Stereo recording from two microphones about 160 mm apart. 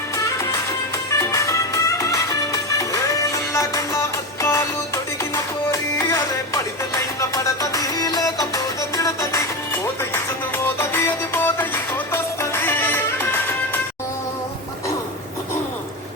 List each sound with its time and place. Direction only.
1.2 s music: 20° left (ahead or behind)